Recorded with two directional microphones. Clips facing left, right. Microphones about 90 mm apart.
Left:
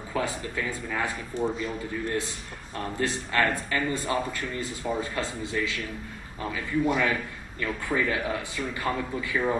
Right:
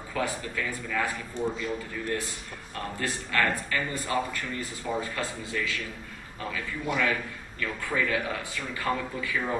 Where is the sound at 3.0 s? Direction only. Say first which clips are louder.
Left 2 dB; 25° left (ahead or behind).